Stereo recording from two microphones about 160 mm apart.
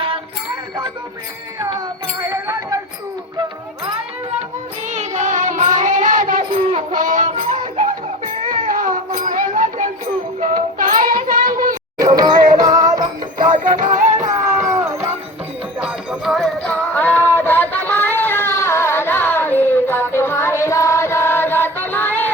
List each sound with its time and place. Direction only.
2.2 s a sound: 20° right (ahead or behind)
4.9 s child singing: 50° right (ahead or behind)
11.9 s music: 25° right (ahead or behind)
13.4 s music: 55° right (ahead or behind)
14.7 s music: 20° right (ahead or behind)
15.8 s music: 5° right (ahead or behind)
16.9 s a sound: 10° left (ahead or behind)